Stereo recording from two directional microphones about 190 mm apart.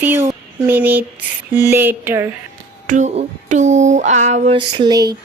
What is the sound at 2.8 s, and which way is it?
Speech, 40° right (ahead or behind).